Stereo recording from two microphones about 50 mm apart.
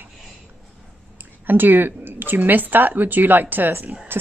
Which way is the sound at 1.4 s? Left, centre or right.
Right.